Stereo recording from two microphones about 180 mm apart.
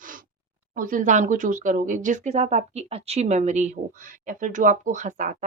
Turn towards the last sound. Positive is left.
turn(degrees=-45)  # may be behind; listen again after turning